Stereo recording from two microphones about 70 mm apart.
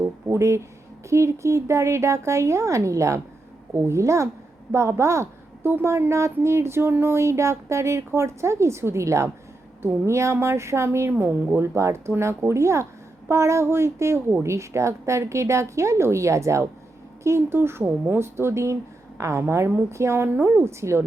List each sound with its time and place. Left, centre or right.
0.3 s a woman's voice: right